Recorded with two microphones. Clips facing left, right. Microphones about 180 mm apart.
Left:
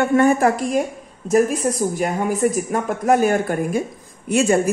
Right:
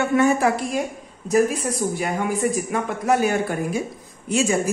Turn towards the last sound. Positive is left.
turn(degrees=60)  # may be behind; listen again after turning